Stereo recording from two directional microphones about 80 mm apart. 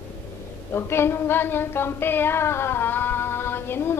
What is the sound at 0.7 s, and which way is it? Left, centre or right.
Female singing, left.